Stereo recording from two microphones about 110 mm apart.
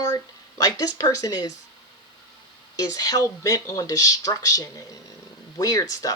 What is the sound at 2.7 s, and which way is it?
Speech, 35° left (ahead or behind).